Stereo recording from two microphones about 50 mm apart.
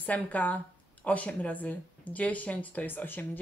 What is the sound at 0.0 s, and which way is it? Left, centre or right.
Speech, left.